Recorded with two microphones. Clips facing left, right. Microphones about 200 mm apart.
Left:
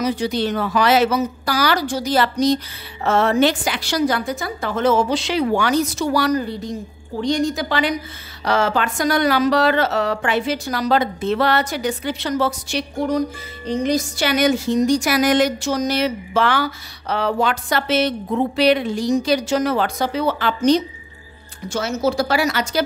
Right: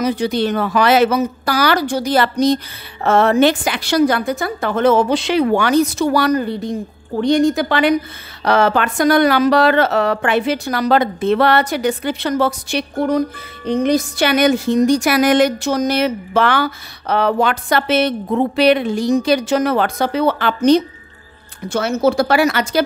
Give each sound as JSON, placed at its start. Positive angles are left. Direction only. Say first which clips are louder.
{"t": 0.0, "sound": "a woman's voice", "louder": "right 3 dB", "side_deg": -60}